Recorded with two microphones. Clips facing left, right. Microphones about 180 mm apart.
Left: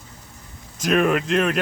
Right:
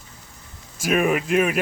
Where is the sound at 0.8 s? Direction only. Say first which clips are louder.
Left 1 dB; 5° right (ahead or behind).